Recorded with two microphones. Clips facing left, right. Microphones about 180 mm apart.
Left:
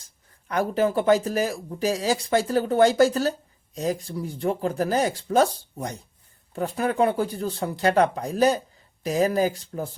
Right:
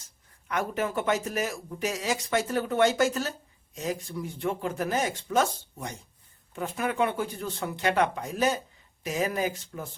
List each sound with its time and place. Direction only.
0.4 s speech: 35° left (ahead or behind)